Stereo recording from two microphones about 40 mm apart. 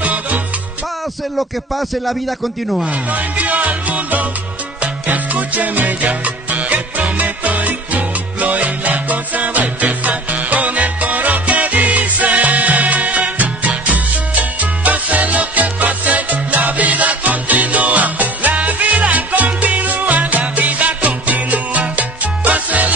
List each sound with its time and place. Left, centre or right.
0.0 s music: right
1.8 s speech: centre
2.9 s music: right